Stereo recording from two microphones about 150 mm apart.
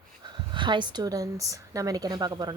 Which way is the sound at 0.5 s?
30° right (ahead or behind).